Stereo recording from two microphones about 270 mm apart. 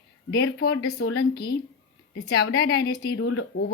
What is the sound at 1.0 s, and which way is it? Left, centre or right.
Speech, left.